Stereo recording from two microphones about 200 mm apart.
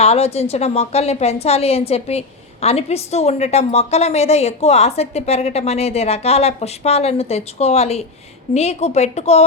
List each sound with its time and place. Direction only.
0.0 s a woman's voice: 30° left (ahead or behind)